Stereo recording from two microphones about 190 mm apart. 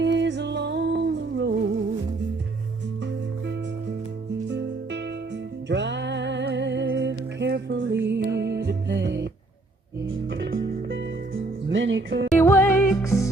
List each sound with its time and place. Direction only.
0.0 s music: 70° right (ahead or behind)
4.4 s music: 65° right (ahead or behind)
12.4 s music: 15° left (ahead or behind)